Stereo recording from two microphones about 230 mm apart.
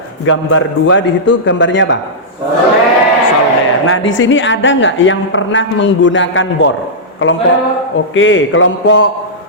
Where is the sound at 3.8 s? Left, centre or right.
Left.